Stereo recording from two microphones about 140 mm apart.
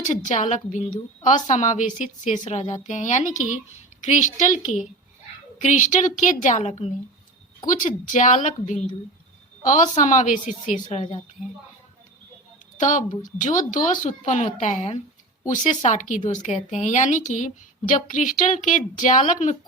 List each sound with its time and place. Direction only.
0.0 s a woman's voice: 60° left (ahead or behind)
7.7 s a woman's voice: 65° left (ahead or behind)
12.7 s a woman's voice: 60° left (ahead or behind)